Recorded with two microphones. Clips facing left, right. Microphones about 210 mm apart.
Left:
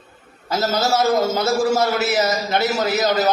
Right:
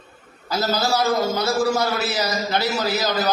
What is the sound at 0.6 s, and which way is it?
A man's voice, 20° left (ahead or behind).